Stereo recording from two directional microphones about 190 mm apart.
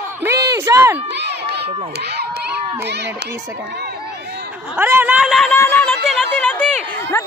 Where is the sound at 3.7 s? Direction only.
60° right (ahead or behind).